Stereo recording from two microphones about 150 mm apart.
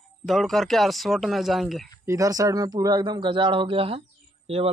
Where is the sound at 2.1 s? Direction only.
25° right (ahead or behind).